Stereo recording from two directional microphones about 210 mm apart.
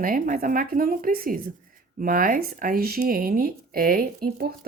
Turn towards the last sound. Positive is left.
turn(degrees=-45)  # may be behind; listen again after turning